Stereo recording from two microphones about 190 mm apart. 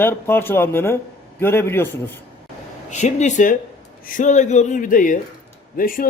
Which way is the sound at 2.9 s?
35° left (ahead or behind).